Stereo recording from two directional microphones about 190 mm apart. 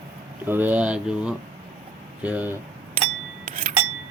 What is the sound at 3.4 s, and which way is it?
Chink, 45° right (ahead or behind).